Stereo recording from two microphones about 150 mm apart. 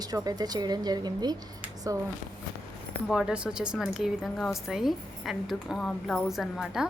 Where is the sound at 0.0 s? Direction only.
25° right (ahead or behind).